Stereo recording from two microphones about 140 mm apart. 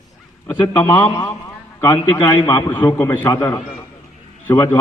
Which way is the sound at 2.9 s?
15° left (ahead or behind).